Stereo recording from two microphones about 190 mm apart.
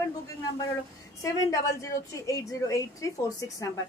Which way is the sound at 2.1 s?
15° left (ahead or behind).